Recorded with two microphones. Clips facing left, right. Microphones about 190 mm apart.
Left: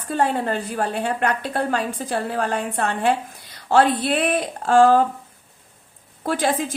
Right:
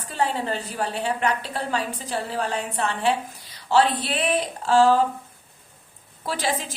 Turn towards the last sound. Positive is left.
turn(degrees=50)  # may be behind; listen again after turning